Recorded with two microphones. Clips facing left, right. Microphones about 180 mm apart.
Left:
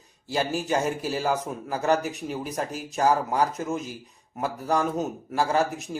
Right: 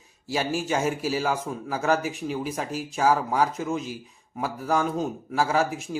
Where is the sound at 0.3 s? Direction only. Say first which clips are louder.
Even; centre (ahead or behind).